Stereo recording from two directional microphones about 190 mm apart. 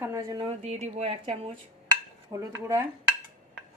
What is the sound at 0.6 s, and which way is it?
Speech, 35° right (ahead or behind).